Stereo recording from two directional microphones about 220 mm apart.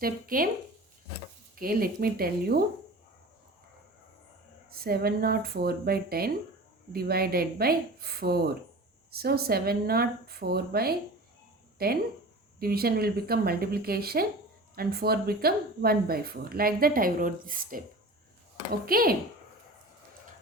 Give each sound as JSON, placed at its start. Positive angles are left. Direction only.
{"t": 0.0, "sound": "speech", "side_deg": -40}
{"t": 1.5, "sound": "speech", "side_deg": -40}
{"t": 4.7, "sound": "speech", "side_deg": -45}